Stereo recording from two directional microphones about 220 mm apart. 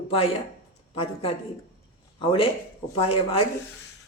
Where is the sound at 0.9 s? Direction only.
25° left (ahead or behind).